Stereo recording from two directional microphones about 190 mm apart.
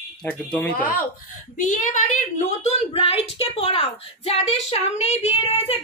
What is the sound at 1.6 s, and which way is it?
Speech, 40° left (ahead or behind).